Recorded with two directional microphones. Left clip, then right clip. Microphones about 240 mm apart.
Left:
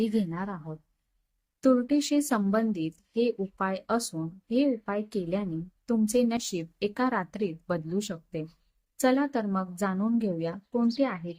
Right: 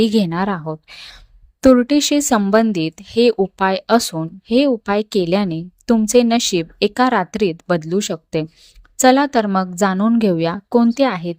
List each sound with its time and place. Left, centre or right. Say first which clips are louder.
0.0 s speech: right 13 dB; right